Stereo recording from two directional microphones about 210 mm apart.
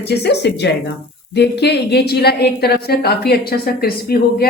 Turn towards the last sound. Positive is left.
turn(degrees=45)  # may be behind; listen again after turning